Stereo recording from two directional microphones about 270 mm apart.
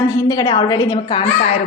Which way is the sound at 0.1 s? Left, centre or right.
Centre.